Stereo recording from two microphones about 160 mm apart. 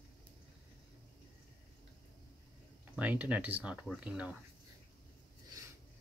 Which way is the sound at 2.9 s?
10° right (ahead or behind).